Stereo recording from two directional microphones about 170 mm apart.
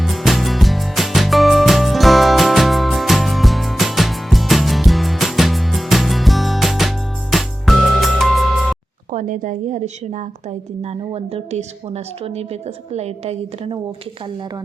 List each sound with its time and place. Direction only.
0.0 s music: centre (ahead or behind)
9.1 s a woman's voice: 50° right (ahead or behind)